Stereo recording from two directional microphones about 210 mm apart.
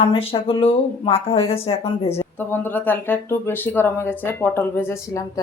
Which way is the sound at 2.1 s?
10° left (ahead or behind).